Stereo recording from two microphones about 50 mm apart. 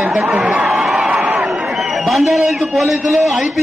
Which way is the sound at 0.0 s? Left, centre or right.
Centre.